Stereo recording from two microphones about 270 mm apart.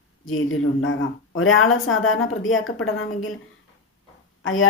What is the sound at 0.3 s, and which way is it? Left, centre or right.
Speech, left.